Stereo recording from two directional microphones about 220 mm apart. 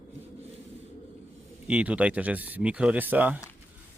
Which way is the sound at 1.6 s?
5° right (ahead or behind).